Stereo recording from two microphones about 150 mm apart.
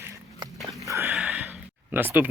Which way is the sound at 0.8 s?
20° right (ahead or behind).